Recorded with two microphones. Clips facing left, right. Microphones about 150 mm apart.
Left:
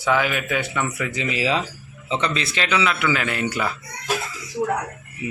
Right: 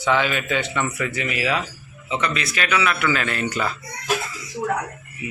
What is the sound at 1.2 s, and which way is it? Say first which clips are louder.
A man's voice: left 3 dB; 25° left (ahead or behind).